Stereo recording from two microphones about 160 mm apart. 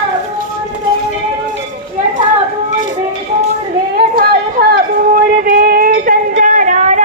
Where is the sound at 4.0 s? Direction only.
70° right (ahead or behind).